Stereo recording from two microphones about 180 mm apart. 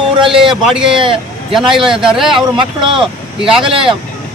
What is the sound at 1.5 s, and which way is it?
Speech, centre (ahead or behind).